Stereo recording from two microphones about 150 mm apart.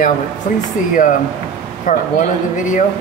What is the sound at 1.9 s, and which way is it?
Speech, 60° left (ahead or behind).